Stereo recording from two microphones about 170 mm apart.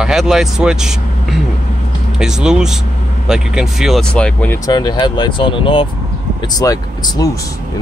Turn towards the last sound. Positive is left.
turn(degrees=20)  # may be behind; listen again after turning